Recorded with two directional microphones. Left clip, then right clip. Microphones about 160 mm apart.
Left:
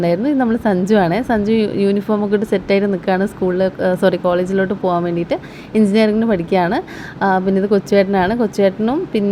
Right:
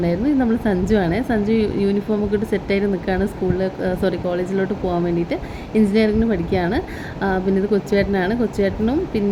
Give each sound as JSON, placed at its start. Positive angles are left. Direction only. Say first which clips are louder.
{"t": 0.0, "sound": "a woman's voice", "louder": "left 4 dB", "side_deg": 40}